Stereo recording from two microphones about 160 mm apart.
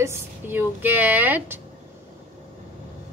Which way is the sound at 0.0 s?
15° right (ahead or behind).